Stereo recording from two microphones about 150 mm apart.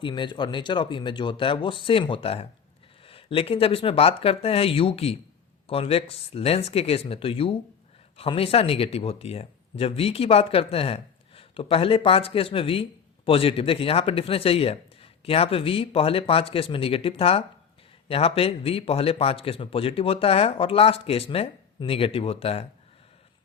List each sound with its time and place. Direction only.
0.0 s speech: 30° left (ahead or behind)